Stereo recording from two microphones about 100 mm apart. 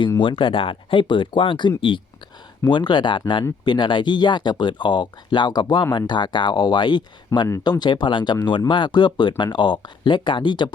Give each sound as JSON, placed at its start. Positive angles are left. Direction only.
{"t": 0.2, "sound": "speech", "side_deg": 55}